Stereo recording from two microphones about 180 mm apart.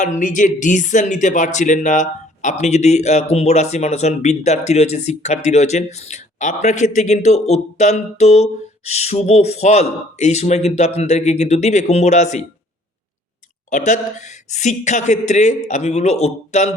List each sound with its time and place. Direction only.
0.0 s speech: 45° left (ahead or behind)
13.7 s speech: 45° left (ahead or behind)